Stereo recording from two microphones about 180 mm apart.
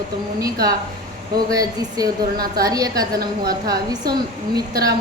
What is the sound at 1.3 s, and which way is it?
A woman's voice, 20° right (ahead or behind).